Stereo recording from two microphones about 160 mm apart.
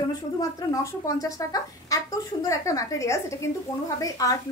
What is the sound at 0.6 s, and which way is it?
A woman's voice, 20° left (ahead or behind).